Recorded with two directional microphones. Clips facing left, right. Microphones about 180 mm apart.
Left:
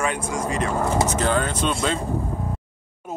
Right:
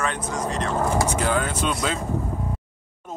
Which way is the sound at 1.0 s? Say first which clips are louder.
Left 1 dB; 10° right (ahead or behind).